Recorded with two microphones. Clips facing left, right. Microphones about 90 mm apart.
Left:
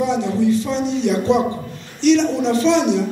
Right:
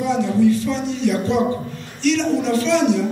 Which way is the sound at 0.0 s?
20° left (ahead or behind).